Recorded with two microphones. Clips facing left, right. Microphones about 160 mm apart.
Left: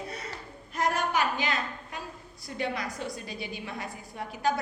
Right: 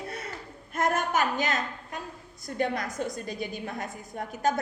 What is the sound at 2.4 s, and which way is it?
A woman's voice, 50° right (ahead or behind).